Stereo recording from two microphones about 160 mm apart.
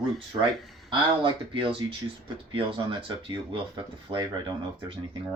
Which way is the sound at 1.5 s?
30° right (ahead or behind).